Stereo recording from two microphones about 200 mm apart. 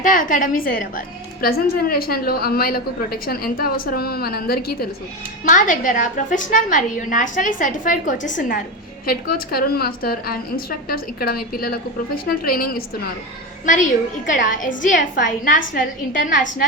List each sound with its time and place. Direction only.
0.0 s a woman's voice: 40° left (ahead or behind)